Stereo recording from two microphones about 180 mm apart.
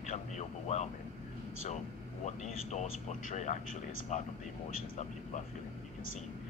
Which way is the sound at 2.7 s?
40° left (ahead or behind).